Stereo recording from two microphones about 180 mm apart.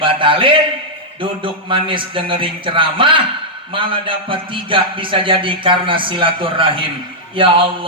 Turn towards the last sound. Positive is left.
turn(degrees=-30)  # may be behind; listen again after turning